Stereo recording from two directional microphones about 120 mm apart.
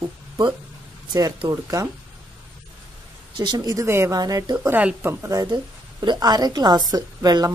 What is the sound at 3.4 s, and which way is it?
A woman's voice, 35° right (ahead or behind).